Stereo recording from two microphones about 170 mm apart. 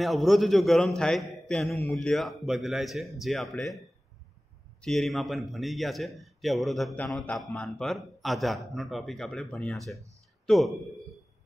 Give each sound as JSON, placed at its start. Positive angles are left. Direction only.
{"t": 0.0, "sound": "a man's voice", "side_deg": 0}
{"t": 4.8, "sound": "a man's voice", "side_deg": 0}